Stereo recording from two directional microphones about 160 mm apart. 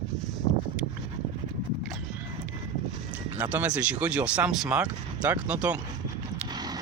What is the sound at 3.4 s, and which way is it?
Speech, 10° right (ahead or behind).